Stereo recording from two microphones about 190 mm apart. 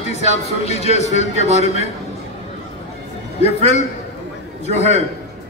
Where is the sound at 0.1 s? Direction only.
35° left (ahead or behind).